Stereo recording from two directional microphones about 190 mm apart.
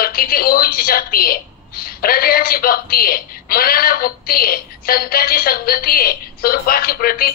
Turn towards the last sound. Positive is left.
turn(degrees=50)  # may be behind; listen again after turning